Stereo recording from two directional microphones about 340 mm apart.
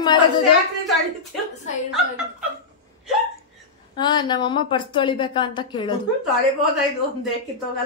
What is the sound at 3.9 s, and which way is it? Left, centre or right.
A woman's voice, centre.